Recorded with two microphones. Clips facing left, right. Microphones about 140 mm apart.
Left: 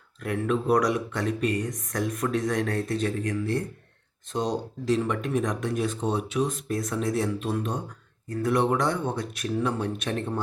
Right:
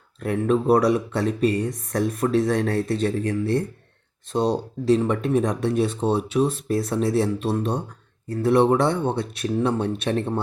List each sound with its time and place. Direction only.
0.2 s speech: 30° right (ahead or behind)